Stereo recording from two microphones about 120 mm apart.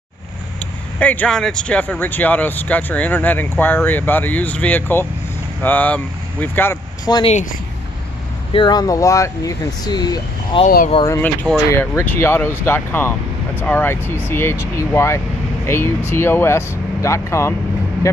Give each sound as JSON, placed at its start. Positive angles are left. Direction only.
{"t": 0.9, "sound": "speech", "side_deg": 10}
{"t": 7.1, "sound": "speech", "side_deg": 35}
{"t": 8.5, "sound": "speech", "side_deg": 35}
{"t": 10.6, "sound": "speech", "side_deg": 50}
{"t": 11.1, "sound": "speech", "side_deg": 20}